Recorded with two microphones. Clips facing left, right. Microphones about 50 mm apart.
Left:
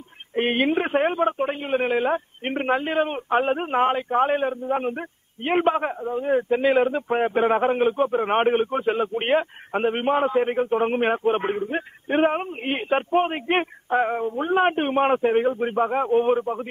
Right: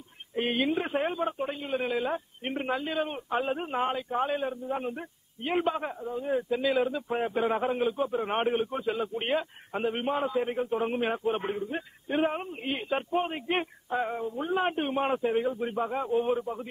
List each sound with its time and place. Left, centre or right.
0.3 s a man's voice: left